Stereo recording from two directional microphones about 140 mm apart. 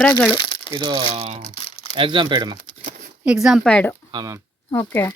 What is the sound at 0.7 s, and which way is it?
Speech, 30° right (ahead or behind).